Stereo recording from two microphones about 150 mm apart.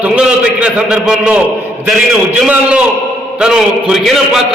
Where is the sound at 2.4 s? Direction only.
10° right (ahead or behind).